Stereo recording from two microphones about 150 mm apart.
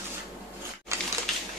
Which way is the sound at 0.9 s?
20° right (ahead or behind).